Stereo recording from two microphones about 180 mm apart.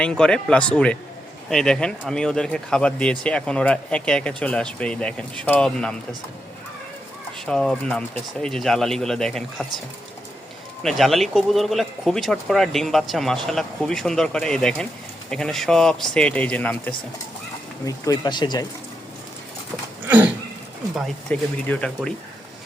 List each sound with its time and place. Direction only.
0.0 s speech: 5° left (ahead or behind)
7.4 s speech: 5° left (ahead or behind)
10.8 s speech: centre (ahead or behind)
17.8 s speech: 20° left (ahead or behind)
20.1 s a sound: 10° right (ahead or behind)
20.9 s speech: 5° left (ahead or behind)